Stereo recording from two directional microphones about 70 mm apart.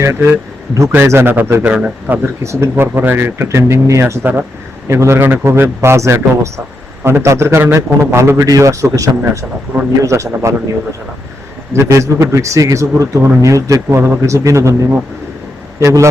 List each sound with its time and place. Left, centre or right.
0.0 s speech: right
1.6 s a man's voice: centre
2.4 s speech: right
4.2 s speech: right
4.9 s speech: right
8.4 s a man's voice: right
11.7 s a man's voice: right